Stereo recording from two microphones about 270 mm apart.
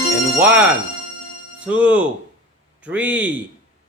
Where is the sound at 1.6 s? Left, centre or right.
Centre.